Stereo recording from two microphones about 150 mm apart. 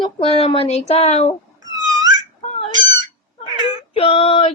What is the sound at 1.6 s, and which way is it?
Wail, 25° right (ahead or behind).